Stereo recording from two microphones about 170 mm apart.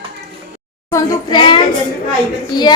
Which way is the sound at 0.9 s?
25° left (ahead or behind).